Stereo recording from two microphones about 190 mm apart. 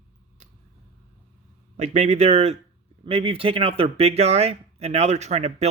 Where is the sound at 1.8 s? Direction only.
35° right (ahead or behind).